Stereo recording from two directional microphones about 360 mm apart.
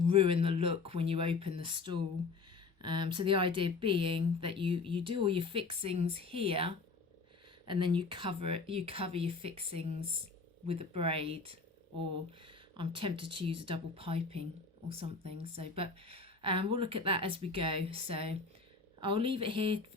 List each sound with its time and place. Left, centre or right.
0.1 s speech: centre
12.7 s speech: centre